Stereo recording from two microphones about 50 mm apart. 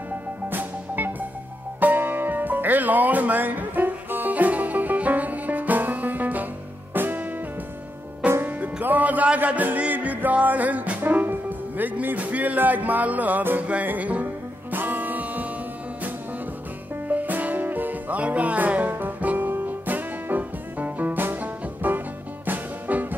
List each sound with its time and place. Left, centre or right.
0.5 s music: right
8.2 s music: right
11.0 s speech: right
13.8 s music: right
17.1 s music: right